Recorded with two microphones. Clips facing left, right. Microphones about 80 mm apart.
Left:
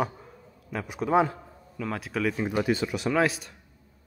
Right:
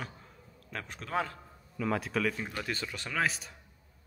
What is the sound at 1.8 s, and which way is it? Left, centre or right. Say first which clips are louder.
Speech: left 1 dB; centre.